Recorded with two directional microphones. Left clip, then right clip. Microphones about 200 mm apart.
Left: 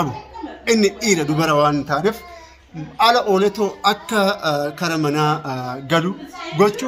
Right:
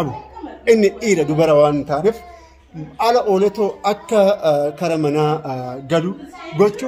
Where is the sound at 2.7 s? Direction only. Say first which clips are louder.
Left 1 dB; 5° right (ahead or behind).